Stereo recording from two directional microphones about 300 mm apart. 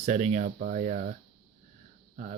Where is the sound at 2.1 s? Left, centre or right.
Right.